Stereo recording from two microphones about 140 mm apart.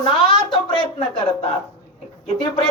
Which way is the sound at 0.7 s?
35° left (ahead or behind).